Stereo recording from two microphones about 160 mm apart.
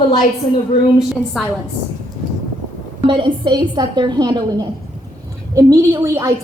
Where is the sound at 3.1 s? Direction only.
30° right (ahead or behind).